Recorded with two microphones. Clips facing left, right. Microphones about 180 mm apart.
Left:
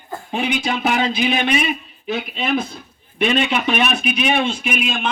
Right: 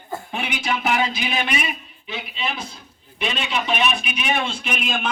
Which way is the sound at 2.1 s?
50° left (ahead or behind).